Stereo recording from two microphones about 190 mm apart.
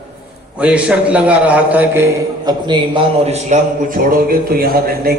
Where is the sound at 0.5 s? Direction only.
5° right (ahead or behind).